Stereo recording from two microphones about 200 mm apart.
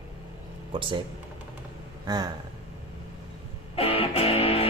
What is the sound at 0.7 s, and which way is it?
Speech, 25° right (ahead or behind).